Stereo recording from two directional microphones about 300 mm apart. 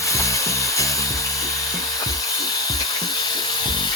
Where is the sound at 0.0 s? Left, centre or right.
Centre.